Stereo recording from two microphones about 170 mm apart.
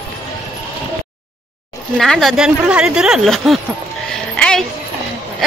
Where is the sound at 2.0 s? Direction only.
Centre (ahead or behind).